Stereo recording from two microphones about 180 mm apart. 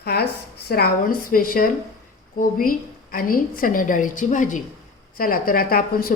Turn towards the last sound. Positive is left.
turn(degrees=55)  # may be behind; listen again after turning